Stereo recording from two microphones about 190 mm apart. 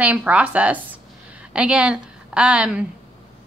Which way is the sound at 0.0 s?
5° right (ahead or behind).